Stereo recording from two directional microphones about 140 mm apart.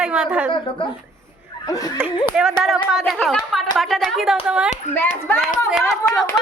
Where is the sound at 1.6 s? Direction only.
25° left (ahead or behind).